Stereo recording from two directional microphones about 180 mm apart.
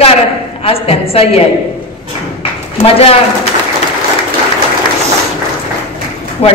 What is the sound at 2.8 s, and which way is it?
Speech, 30° left (ahead or behind).